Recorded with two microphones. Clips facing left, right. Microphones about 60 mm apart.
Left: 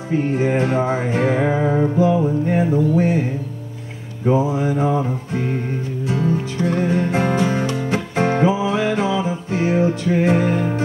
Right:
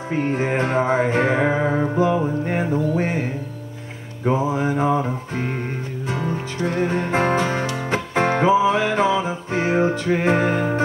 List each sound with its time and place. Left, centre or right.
0.1 s music: right
4.6 s music: right